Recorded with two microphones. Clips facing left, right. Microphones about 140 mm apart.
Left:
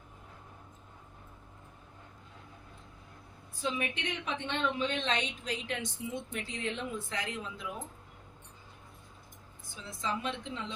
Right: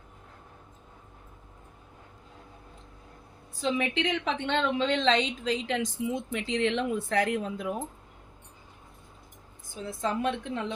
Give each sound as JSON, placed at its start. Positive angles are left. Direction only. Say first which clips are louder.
{"t": 3.6, "sound": "a woman's voice", "louder": "right 7 dB", "side_deg": -90}
{"t": 9.7, "sound": "a woman's voice", "louder": "right 6 dB", "side_deg": -50}